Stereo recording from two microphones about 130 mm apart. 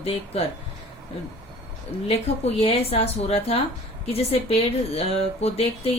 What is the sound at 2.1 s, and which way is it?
Speech, 55° left (ahead or behind).